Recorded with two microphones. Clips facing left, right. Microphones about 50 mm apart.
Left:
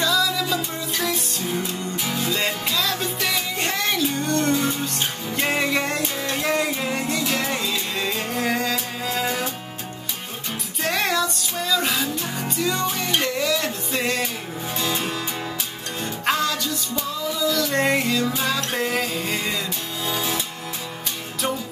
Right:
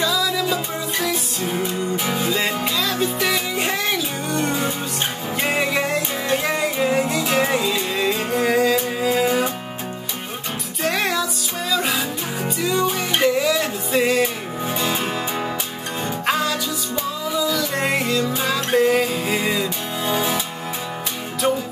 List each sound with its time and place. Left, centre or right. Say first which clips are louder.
0.0 s music: right 1 dB; centre
1.4 s music: right 6 dB; centre
2.3 s music: right 2 dB; centre
7.2 s music: right 5 dB; centre
10.8 s music: right 1 dB; centre
14.8 s music: right 1 dB; centre
16.3 s music: even; centre